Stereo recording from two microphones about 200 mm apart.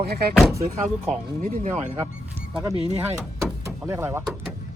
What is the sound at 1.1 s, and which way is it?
Speech, 35° right (ahead or behind).